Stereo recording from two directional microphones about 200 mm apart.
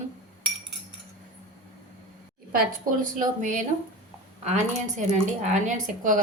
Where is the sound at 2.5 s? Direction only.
40° right (ahead or behind).